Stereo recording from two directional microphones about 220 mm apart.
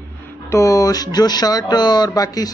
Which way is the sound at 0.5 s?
15° left (ahead or behind).